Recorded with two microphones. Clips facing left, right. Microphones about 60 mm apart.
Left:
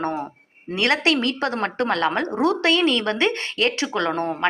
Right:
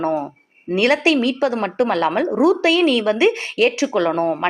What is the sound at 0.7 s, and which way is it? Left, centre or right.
A woman's voice, centre.